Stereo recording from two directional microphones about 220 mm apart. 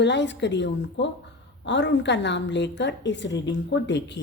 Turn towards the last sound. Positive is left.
turn(degrees=50)  # may be behind; listen again after turning